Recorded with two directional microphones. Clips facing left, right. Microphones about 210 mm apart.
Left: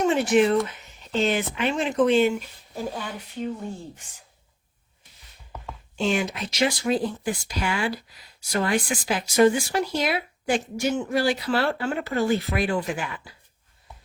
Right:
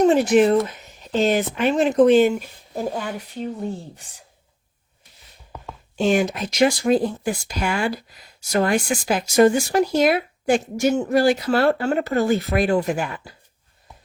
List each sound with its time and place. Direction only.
0.0 s speech: 40° right (ahead or behind)
6.0 s speech: 45° right (ahead or behind)